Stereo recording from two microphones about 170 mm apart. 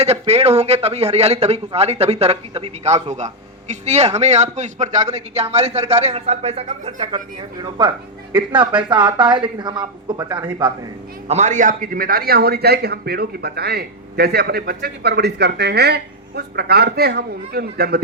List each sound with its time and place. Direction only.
0.0 s a man's voice: 40° right (ahead or behind)
11.3 s a man's voice: 45° right (ahead or behind); by 18.0 s 65° right (ahead or behind)